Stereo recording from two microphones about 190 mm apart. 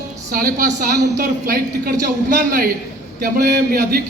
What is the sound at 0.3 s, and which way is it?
A man's voice, 45° right (ahead or behind).